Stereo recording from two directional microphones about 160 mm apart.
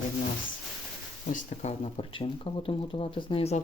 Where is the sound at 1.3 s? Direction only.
45° left (ahead or behind).